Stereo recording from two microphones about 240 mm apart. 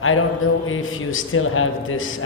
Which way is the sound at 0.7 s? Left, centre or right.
Left.